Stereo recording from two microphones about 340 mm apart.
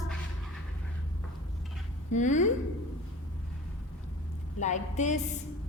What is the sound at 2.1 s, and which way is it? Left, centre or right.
Speech, left.